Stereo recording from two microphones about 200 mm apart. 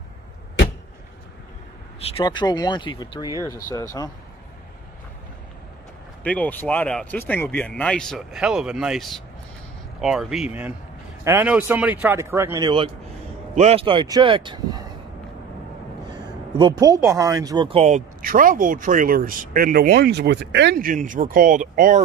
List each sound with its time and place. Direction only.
2.0 s speech: 25° left (ahead or behind)
6.2 s speech: 5° left (ahead or behind); by 14.8 s 25° right (ahead or behind)
16.1 s speech: 20° right (ahead or behind); by 22.0 s 40° right (ahead or behind)